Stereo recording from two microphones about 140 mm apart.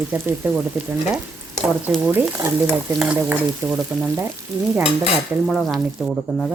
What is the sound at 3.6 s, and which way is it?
Stir, 20° right (ahead or behind).